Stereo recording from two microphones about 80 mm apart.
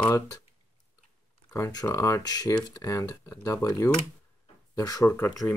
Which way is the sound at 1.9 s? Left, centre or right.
Left.